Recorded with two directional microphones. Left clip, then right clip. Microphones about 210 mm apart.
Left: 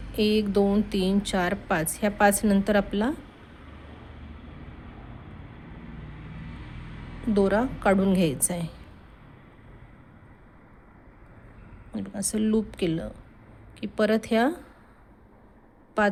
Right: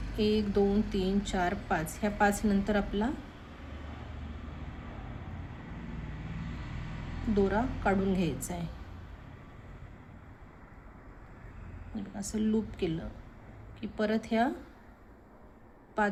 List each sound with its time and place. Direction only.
0.2 s a woman's voice: 55° left (ahead or behind)
7.3 s a woman's voice: 55° left (ahead or behind)
11.9 s a woman's voice: 55° left (ahead or behind)
16.0 s a woman's voice: 55° left (ahead or behind)